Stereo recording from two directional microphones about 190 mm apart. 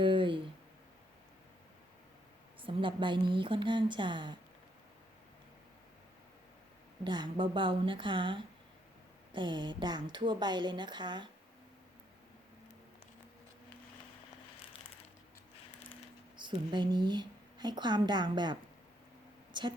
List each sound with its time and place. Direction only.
0.0 s a sound: 25° right (ahead or behind)
2.6 s a woman's voice: 25° right (ahead or behind)
7.0 s a woman's voice: 25° right (ahead or behind)
16.4 s a woman's voice: 25° right (ahead or behind)
19.5 s a woman's voice: 25° right (ahead or behind)